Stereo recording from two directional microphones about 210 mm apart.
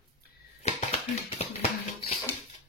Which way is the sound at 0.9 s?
30° left (ahead or behind).